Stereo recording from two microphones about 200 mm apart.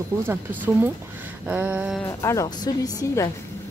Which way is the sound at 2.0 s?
15° left (ahead or behind).